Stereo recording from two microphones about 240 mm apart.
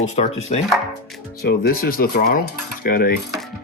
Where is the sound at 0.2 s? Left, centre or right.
Left.